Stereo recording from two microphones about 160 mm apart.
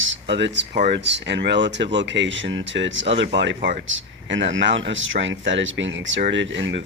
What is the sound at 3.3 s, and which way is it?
Speech, 90° right.